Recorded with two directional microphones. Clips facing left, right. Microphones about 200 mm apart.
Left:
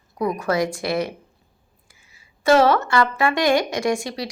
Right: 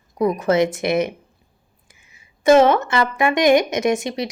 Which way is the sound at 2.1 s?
20° right (ahead or behind).